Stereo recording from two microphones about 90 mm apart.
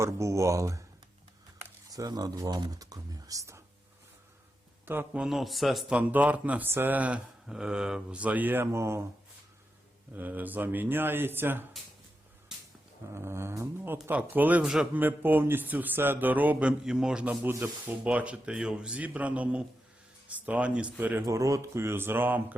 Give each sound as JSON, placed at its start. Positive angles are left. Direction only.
{"t": 0.0, "sound": "speech", "side_deg": -35}
{"t": 1.9, "sound": "speech", "side_deg": -45}
{"t": 4.9, "sound": "speech", "side_deg": -20}
{"t": 5.2, "sound": "a man's voice", "side_deg": 0}
{"t": 5.9, "sound": "speech", "side_deg": -15}
{"t": 10.1, "sound": "speech", "side_deg": -20}
{"t": 13.1, "sound": "speech", "side_deg": -30}
{"t": 14.6, "sound": "speech", "side_deg": -5}
{"t": 14.9, "sound": "speech", "side_deg": -20}
{"t": 17.4, "sound": "speech", "side_deg": -20}
{"t": 21.2, "sound": "speech", "side_deg": -35}